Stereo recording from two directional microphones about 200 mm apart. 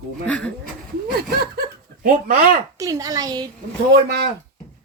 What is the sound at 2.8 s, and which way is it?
Speech, 15° right (ahead or behind).